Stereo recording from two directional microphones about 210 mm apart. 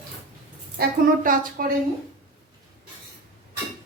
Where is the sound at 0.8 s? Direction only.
40° right (ahead or behind).